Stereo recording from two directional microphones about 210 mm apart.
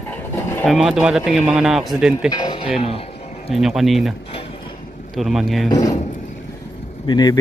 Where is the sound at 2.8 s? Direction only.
25° left (ahead or behind).